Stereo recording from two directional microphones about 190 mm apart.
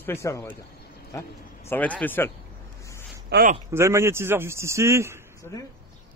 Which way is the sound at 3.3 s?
60° right (ahead or behind).